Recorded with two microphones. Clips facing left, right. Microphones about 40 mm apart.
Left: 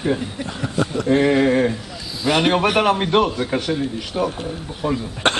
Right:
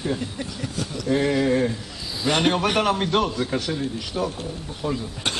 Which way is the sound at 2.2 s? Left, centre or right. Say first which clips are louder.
Left 3 dB; centre.